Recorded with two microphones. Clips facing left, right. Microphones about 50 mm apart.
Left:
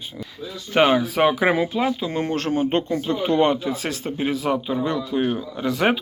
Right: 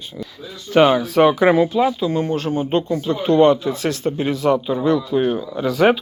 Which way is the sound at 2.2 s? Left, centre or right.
Left.